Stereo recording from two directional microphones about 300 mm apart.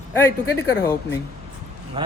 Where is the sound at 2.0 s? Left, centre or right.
Centre.